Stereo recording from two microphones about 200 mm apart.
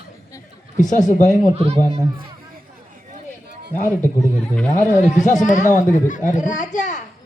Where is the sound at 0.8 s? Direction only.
40° left (ahead or behind).